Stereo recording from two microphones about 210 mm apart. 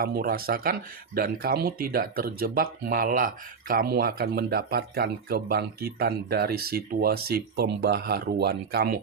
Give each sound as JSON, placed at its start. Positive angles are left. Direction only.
{"t": 0.0, "sound": "speech", "side_deg": -45}